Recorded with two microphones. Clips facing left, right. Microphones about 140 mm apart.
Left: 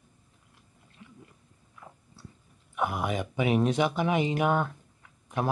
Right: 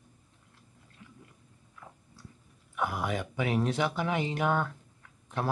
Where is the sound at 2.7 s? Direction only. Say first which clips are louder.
Left 2 dB; 20° left (ahead or behind).